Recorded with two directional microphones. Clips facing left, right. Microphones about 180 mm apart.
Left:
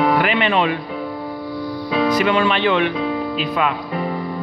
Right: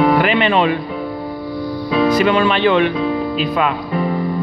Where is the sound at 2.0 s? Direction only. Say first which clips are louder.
Right 3 dB; 30° right (ahead or behind).